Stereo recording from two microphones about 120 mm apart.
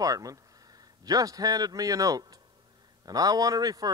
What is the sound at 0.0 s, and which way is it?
A man's voice, 30° right (ahead or behind).